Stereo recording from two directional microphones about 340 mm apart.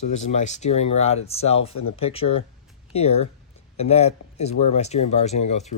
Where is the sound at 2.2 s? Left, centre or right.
Left.